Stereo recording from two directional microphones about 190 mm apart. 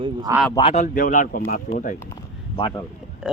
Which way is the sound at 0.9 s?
45° left (ahead or behind).